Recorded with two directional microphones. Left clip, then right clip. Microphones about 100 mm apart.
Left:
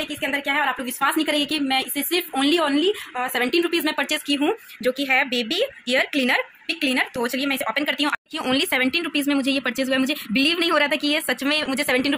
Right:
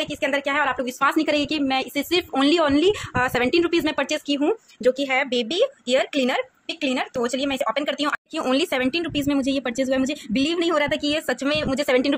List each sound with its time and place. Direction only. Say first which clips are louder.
0.0 s a woman's voice: right 2 dB; 30° right (ahead or behind)